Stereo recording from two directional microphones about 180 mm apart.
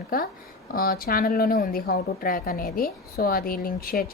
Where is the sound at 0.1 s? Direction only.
55° left (ahead or behind).